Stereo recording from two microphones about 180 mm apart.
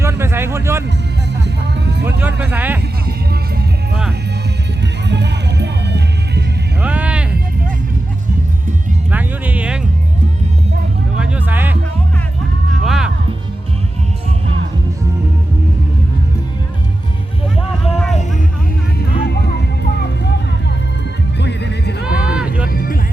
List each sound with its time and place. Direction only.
0.0 s music: 15° right (ahead or behind)
1.5 s music: 70° right (ahead or behind)
2.0 s speech: 10° right (ahead or behind)
5.0 s music: 70° right (ahead or behind)
6.8 s music: 10° right (ahead or behind)
9.1 s music: 10° right (ahead or behind)
11.2 s music: 10° right (ahead or behind)
12.8 s music: centre (ahead or behind)
17.9 s music: centre (ahead or behind)
21.3 s music: 70° left (ahead or behind)
22.0 s a sound: 5° right (ahead or behind)